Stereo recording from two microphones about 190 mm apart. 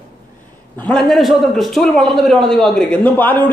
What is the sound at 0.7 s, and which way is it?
A man's voice, 5° left (ahead or behind).